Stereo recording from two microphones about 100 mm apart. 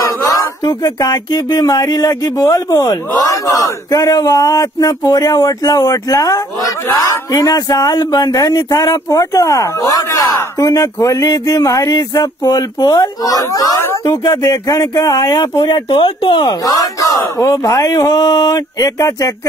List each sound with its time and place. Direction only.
0.3 s speech: 35° left (ahead or behind); by 16.4 s 60° left (ahead or behind)
16.4 s speech: 40° left (ahead or behind)